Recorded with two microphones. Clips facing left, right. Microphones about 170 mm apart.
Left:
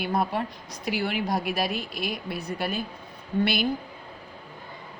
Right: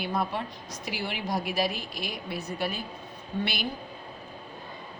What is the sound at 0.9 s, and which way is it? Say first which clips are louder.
A woman's voice: left 5 dB; 55° left (ahead or behind).